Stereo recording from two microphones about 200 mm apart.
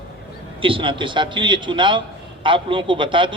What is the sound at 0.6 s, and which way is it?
A man's voice, 25° right (ahead or behind).